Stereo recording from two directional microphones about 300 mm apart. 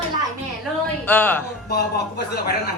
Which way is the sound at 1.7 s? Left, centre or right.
Left.